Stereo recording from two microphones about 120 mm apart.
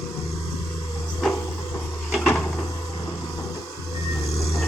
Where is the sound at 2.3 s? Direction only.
10° left (ahead or behind).